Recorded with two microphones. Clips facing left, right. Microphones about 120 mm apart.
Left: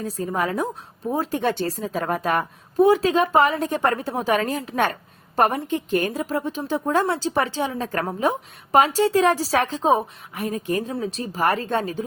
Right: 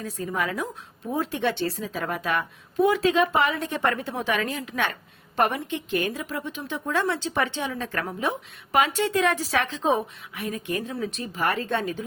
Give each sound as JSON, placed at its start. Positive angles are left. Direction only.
{"t": 0.0, "sound": "a woman's voice", "side_deg": 40}